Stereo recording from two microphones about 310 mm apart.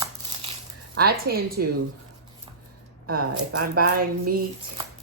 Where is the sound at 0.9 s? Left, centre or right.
Right.